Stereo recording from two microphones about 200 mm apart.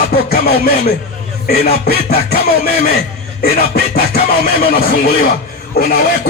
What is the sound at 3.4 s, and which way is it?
Music, 45° left (ahead or behind).